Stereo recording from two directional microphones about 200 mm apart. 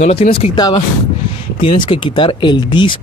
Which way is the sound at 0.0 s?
30° left (ahead or behind).